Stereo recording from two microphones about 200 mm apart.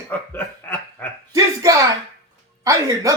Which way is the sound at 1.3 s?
15° right (ahead or behind).